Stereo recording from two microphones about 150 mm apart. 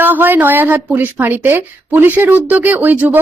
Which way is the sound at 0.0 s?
15° right (ahead or behind).